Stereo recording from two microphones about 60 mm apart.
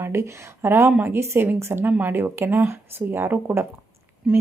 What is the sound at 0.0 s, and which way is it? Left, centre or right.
A woman's voice, right.